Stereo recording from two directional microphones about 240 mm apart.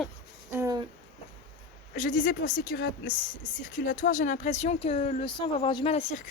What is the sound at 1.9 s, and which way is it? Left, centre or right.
A woman's voice, left.